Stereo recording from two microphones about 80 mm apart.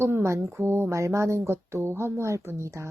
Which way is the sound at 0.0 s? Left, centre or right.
Right.